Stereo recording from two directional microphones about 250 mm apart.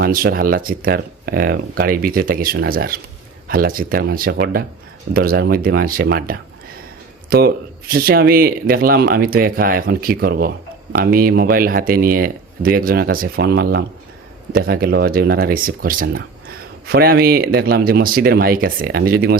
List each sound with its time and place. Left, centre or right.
0.0 s speech: right